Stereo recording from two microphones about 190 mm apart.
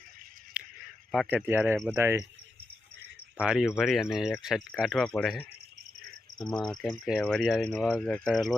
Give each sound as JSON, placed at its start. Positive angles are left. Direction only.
{"t": 0.6, "sound": "a sound", "side_deg": -5}
{"t": 1.1, "sound": "speech", "side_deg": 0}
{"t": 1.5, "sound": "speech", "side_deg": -10}
{"t": 3.3, "sound": "speech", "side_deg": -5}
{"t": 6.4, "sound": "speech", "side_deg": 20}
{"t": 6.7, "sound": "speech", "side_deg": 0}